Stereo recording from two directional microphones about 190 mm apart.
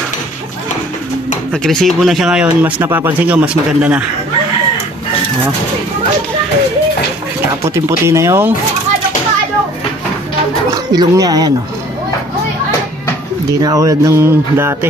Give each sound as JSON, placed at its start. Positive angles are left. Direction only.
{"t": 1.5, "sound": "speech", "side_deg": 5}
{"t": 7.6, "sound": "speech", "side_deg": -15}
{"t": 10.9, "sound": "speech", "side_deg": -20}
{"t": 13.6, "sound": "speech", "side_deg": -20}